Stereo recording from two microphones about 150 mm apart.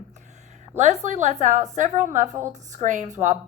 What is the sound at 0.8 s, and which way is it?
A woman's voice, 50° right (ahead or behind).